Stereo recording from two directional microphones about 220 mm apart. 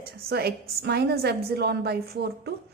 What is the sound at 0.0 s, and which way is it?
A woman's voice, 45° right (ahead or behind).